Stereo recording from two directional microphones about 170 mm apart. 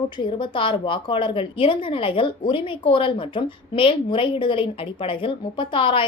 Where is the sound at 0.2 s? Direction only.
30° left (ahead or behind).